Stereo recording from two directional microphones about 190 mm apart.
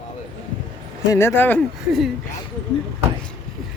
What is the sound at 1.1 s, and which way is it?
Speech, 15° left (ahead or behind).